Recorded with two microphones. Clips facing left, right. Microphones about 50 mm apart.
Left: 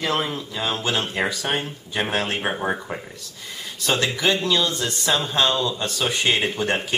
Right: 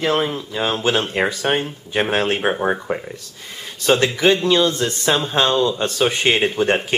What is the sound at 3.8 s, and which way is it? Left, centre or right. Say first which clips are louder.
Speech: right 6 dB; right.